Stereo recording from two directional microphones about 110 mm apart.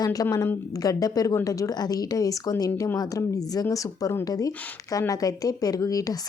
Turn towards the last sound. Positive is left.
turn(degrees=30)  # may be behind; listen again after turning